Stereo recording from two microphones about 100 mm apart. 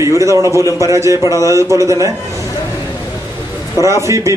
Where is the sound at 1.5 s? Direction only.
30° right (ahead or behind).